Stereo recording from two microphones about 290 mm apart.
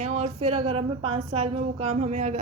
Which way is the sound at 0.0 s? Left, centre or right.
Right.